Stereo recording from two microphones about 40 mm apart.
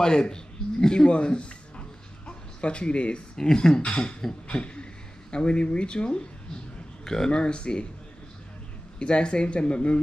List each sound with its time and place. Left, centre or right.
0.0 s speech: centre
3.3 s speech: centre
3.8 s speech: left
9.0 s speech: left